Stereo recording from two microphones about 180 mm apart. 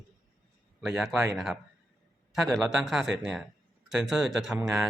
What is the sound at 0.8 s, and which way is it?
Speech, centre (ahead or behind).